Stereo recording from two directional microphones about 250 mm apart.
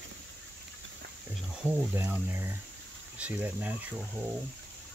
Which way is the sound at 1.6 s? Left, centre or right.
Centre.